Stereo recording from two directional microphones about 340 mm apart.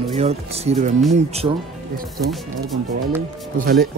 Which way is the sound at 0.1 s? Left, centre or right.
Centre.